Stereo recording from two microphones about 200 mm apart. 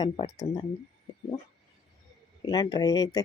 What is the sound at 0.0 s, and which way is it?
Speech, 20° left (ahead or behind).